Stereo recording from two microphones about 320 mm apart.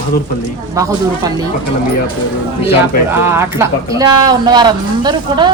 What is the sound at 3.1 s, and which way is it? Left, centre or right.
Speech, centre.